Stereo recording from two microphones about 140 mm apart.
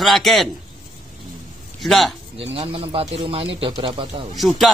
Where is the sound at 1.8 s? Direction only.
Centre (ahead or behind).